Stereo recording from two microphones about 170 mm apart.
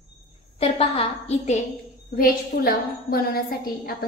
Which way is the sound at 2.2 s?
60° left (ahead or behind).